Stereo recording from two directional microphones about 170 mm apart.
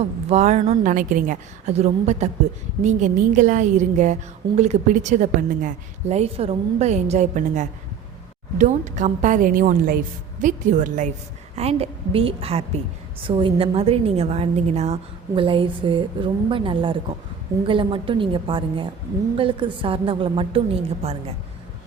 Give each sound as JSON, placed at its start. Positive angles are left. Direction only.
{"t": 0.0, "sound": "a woman's voice", "side_deg": -40}
{"t": 11.5, "sound": "a woman's voice", "side_deg": -35}